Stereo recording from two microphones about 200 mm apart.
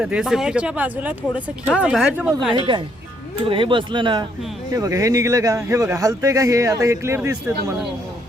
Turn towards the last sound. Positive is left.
turn(degrees=-15)  # may be behind; listen again after turning